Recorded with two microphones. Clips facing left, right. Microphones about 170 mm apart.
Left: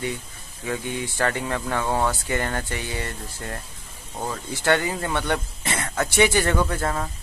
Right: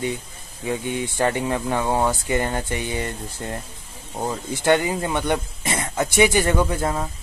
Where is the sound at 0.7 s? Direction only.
20° right (ahead or behind).